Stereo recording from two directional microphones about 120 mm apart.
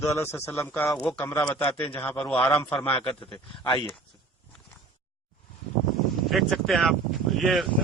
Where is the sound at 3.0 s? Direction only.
45° left (ahead or behind).